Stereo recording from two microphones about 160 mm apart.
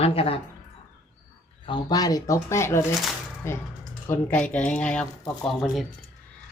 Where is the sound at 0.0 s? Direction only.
35° left (ahead or behind).